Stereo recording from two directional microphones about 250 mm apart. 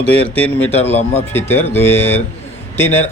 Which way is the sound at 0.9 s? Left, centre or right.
Left.